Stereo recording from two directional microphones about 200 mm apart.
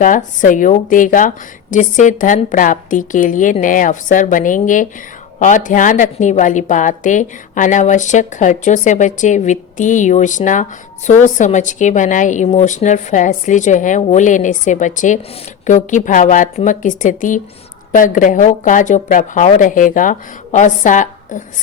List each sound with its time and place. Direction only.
0.0 s a woman's voice: 40° left (ahead or behind)